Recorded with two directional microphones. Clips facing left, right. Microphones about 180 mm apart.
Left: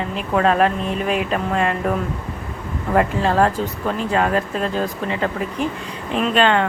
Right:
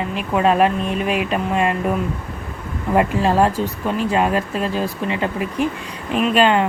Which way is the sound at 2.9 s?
10° right (ahead or behind).